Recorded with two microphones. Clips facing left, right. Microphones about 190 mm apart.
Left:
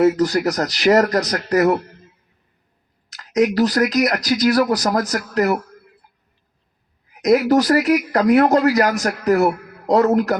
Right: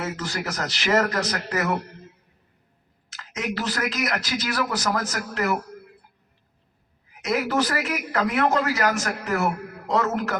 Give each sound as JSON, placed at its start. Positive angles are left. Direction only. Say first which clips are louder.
{"t": 0.0, "sound": "speech", "louder": "left 14 dB", "side_deg": 40}
{"t": 3.1, "sound": "speech", "louder": "left 13 dB", "side_deg": 40}
{"t": 7.1, "sound": "speech", "louder": "left 10 dB", "side_deg": 40}